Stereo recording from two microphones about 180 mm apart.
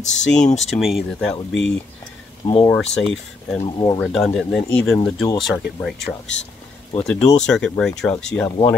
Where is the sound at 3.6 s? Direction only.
25° left (ahead or behind).